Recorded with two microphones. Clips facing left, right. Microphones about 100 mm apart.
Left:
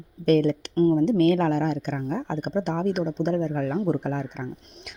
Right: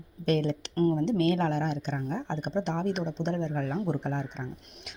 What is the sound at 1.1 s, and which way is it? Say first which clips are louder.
Speech: left 6 dB; 50° left (ahead or behind).